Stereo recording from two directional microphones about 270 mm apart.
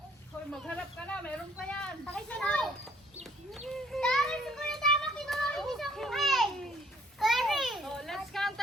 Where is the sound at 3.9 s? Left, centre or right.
Centre.